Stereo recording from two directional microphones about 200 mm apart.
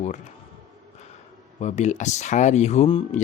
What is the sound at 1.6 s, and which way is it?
Speech, 35° left (ahead or behind).